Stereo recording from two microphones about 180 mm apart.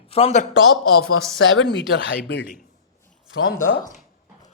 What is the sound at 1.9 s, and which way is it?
Speech, 75° left (ahead or behind).